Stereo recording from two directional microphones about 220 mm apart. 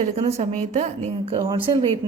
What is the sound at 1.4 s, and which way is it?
Speech, 20° right (ahead or behind).